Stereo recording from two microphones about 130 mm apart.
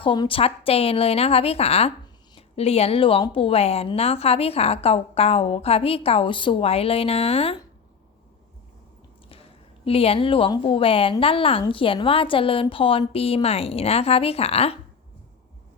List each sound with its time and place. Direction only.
0.0 s a woman's voice: 40° left (ahead or behind)
9.8 s a woman's voice: 50° left (ahead or behind)